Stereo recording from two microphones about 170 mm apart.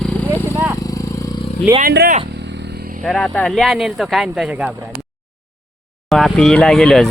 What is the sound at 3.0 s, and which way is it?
Speech, 5° left (ahead or behind).